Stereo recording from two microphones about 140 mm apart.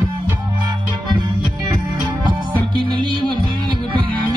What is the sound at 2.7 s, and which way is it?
Music, 35° right (ahead or behind).